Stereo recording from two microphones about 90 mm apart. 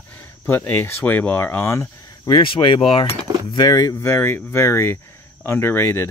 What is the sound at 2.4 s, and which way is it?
Speech, 70° left (ahead or behind).